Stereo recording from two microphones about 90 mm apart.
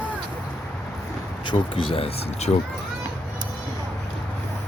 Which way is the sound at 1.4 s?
75° left (ahead or behind).